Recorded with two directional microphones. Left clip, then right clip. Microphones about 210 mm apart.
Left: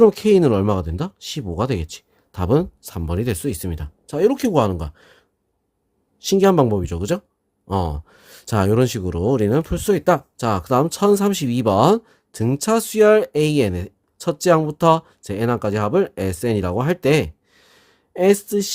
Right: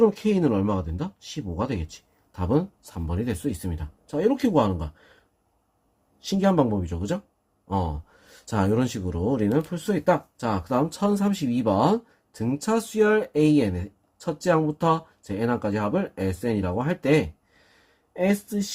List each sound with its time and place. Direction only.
0.0 s speech: 55° left (ahead or behind)